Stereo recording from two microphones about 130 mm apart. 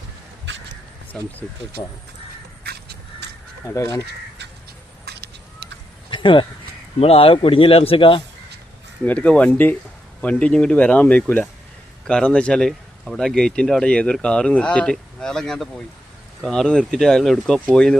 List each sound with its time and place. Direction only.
1.1 s speech: 10° left (ahead or behind)
3.8 s speech: 25° left (ahead or behind)
6.1 s a sound: 40° left (ahead or behind)
7.0 s speech: 50° left (ahead or behind)
9.0 s speech: 10° left (ahead or behind)